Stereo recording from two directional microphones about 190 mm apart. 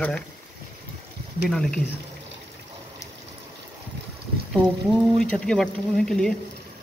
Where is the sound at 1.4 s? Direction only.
5° left (ahead or behind).